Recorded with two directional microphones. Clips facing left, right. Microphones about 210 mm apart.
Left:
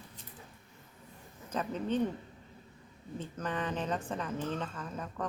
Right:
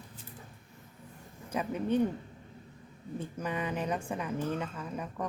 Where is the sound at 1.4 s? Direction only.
10° right (ahead or behind).